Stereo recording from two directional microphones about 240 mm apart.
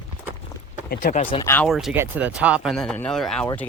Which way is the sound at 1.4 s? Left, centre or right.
Centre.